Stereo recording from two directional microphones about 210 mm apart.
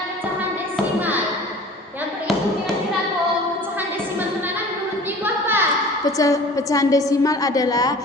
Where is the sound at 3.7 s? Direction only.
10° right (ahead or behind).